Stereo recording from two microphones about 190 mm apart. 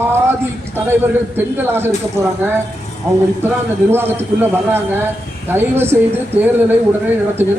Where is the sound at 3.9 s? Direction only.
10° right (ahead or behind).